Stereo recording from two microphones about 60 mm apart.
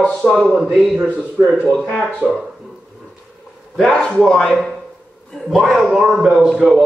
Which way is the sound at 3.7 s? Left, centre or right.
Centre.